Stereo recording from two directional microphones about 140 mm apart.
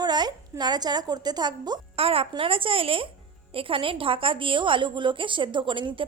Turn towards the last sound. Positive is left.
turn(degrees=-35)  # may be behind; listen again after turning